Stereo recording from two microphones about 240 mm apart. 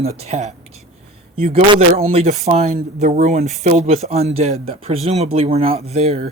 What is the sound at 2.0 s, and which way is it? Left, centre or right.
Speech, right.